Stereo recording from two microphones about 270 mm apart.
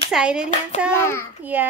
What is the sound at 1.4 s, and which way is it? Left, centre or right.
Speech, centre.